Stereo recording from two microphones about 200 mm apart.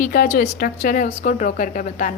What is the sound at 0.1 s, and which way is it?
A woman's voice, 45° left (ahead or behind).